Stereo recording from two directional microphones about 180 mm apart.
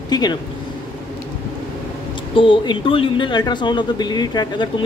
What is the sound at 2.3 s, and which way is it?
Speech, 25° left (ahead or behind).